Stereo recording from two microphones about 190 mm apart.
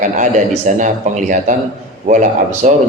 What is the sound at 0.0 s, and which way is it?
A man's voice, 40° right (ahead or behind).